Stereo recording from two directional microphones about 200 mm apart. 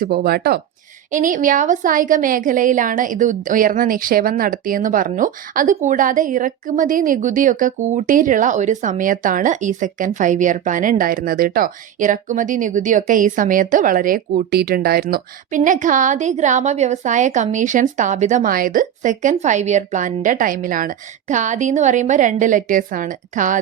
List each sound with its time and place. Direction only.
0.0 s speech: 50° right (ahead or behind)
1.1 s a woman's voice: 40° right (ahead or behind)